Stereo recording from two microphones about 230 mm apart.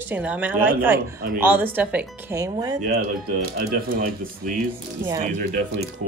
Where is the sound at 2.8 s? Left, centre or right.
Right.